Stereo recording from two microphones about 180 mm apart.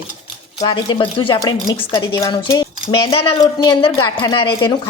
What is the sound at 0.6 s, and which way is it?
Speech, 25° left (ahead or behind).